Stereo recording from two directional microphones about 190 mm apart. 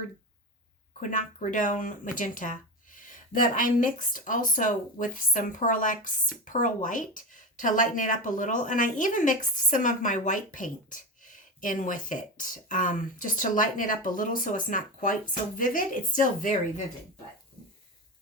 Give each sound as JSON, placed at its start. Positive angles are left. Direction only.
{"t": 0.9, "sound": "speech", "side_deg": 40}